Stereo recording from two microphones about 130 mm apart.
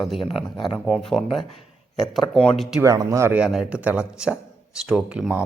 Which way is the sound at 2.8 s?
25° right (ahead or behind).